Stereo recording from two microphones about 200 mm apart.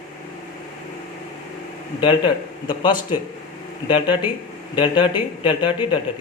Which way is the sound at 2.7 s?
25° left (ahead or behind).